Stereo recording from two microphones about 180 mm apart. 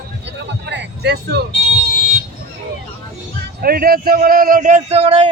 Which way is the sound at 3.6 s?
55° right (ahead or behind).